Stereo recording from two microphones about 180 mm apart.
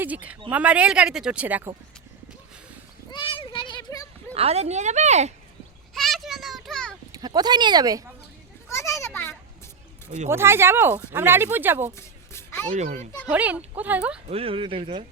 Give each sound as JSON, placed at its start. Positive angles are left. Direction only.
{"t": 0.0, "sound": "speech", "side_deg": -10}
{"t": 3.1, "sound": "a sound", "side_deg": 30}
{"t": 4.4, "sound": "speech", "side_deg": -35}
{"t": 5.9, "sound": "a sound", "side_deg": 0}
{"t": 7.1, "sound": "speech", "side_deg": -20}
{"t": 8.7, "sound": "children playing", "side_deg": 15}
{"t": 10.2, "sound": "speech", "side_deg": -15}
{"t": 11.9, "sound": "a sound", "side_deg": 15}
{"t": 12.7, "sound": "speech", "side_deg": -40}
{"t": 13.3, "sound": "speech", "side_deg": -10}
{"t": 14.3, "sound": "speech", "side_deg": -30}